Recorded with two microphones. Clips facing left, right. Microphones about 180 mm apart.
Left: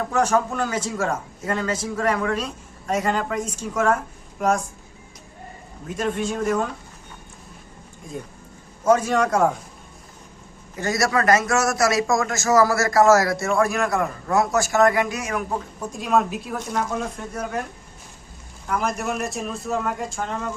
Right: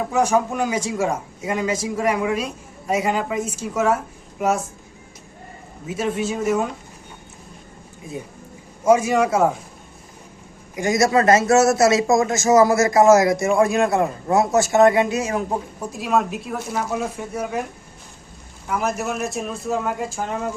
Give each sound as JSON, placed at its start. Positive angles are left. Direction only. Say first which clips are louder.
{"t": 0.0, "sound": "a man's voice", "louder": "right 2 dB", "side_deg": -10}
{"t": 5.8, "sound": "speech", "louder": "right 1 dB", "side_deg": -5}
{"t": 8.8, "sound": "a man's voice", "louder": "right 2 dB", "side_deg": -10}
{"t": 10.8, "sound": "a man's voice", "louder": "right 4 dB", "side_deg": -15}
{"t": 15.8, "sound": "a man's voice", "louder": "left 1 dB", "side_deg": -5}
{"t": 18.7, "sound": "speech", "louder": "right 1 dB", "side_deg": -5}